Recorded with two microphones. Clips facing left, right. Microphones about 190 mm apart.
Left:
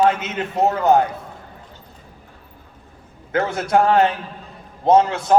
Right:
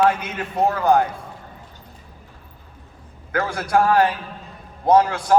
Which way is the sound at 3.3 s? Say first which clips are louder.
Left 2 dB; 20° left (ahead or behind).